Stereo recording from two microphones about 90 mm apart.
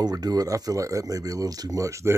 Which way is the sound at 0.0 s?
45° right (ahead or behind).